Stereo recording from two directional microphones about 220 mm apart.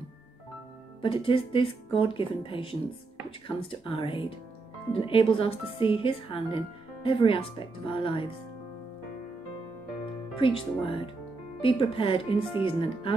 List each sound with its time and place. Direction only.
1.0 s speech: 25° left (ahead or behind)
10.3 s speech: 25° left (ahead or behind)